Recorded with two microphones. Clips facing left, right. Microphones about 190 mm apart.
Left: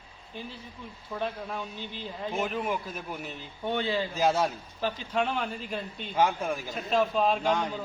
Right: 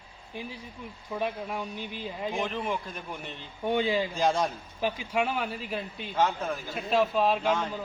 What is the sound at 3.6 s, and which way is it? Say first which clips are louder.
Speech: right 3 dB; 15° right (ahead or behind).